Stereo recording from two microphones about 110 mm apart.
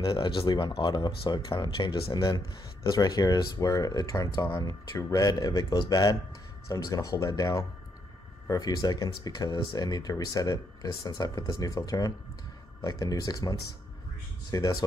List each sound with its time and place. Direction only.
0.0 s speech: 55° left (ahead or behind); by 14.9 s 35° left (ahead or behind)